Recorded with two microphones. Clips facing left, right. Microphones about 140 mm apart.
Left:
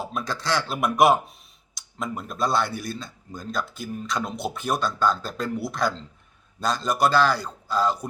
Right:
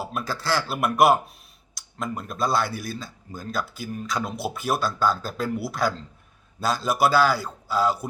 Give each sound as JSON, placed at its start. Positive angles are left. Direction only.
{"t": 0.0, "sound": "a man's voice", "side_deg": -5}